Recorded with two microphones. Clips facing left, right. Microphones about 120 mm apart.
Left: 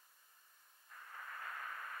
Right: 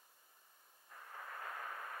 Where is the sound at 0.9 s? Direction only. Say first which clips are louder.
Right 1 dB; 20° right (ahead or behind).